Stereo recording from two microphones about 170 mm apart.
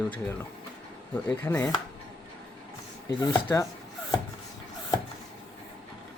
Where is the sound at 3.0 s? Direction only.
25° left (ahead or behind).